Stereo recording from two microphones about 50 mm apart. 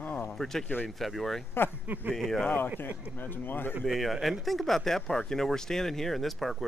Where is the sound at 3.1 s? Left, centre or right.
Left.